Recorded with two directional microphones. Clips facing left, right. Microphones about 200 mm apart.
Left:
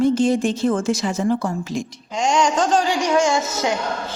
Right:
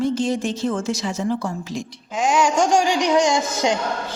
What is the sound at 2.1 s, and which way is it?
Speech, 5° right (ahead or behind).